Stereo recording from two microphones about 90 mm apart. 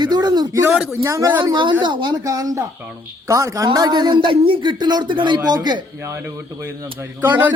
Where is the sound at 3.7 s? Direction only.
50° right (ahead or behind).